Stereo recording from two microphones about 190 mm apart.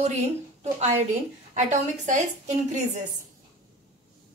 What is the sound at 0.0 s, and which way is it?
A woman's voice, 35° right (ahead or behind).